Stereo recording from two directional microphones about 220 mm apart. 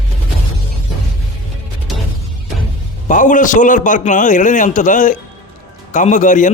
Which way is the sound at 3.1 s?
35° left (ahead or behind).